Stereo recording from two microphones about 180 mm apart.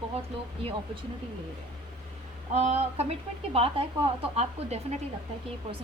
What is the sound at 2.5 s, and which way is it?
A woman's voice, 35° right (ahead or behind).